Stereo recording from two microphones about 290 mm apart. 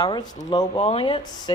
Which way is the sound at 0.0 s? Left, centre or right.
Centre.